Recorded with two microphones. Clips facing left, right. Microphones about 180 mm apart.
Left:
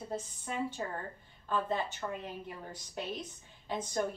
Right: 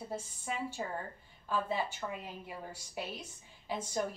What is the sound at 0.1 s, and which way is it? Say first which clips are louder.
A woman's voice: left 2 dB; 10° right (ahead or behind).